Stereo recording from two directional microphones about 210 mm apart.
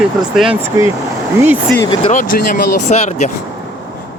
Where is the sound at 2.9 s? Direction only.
30° left (ahead or behind).